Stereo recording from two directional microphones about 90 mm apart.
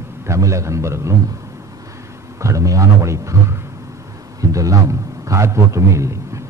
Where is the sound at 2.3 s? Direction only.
35° right (ahead or behind).